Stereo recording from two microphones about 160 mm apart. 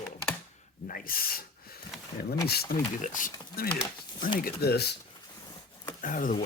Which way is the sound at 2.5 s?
65° left (ahead or behind).